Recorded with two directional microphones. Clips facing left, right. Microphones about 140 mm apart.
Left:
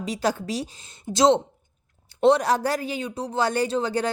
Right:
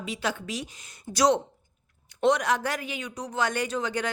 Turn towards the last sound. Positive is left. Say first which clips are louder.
# left 5 dB
turn(degrees=35)  # may be behind; listen again after turning